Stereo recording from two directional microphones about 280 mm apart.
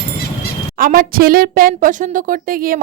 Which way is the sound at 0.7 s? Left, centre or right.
Right.